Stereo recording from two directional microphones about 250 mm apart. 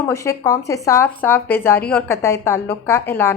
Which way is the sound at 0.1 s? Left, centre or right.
Centre.